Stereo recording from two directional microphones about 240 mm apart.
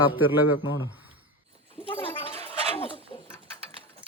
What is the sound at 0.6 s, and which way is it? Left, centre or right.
Speech, left.